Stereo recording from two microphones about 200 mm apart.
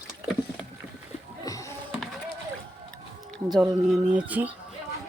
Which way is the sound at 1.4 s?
15° left (ahead or behind).